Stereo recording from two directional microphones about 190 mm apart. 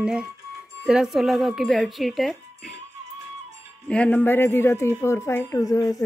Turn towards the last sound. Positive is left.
turn(degrees=20)  # may be behind; listen again after turning